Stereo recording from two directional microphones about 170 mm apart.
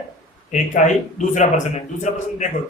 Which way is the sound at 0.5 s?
45° left (ahead or behind).